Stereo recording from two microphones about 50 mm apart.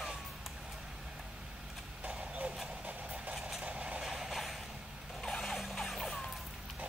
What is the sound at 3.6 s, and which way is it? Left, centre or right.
Vehicle, right.